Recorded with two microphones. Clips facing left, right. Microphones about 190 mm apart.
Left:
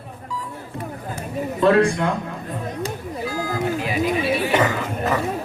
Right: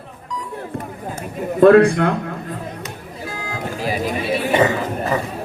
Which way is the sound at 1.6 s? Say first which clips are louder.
Right 7 dB; 55° right (ahead or behind).